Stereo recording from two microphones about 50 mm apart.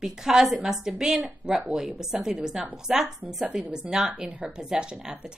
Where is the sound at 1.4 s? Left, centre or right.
Right.